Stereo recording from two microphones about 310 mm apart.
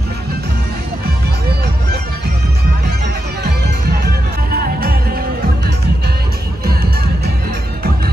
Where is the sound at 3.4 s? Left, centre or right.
Right.